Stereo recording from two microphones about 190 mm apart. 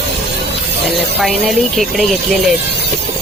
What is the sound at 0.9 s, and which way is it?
Speech, centre (ahead or behind).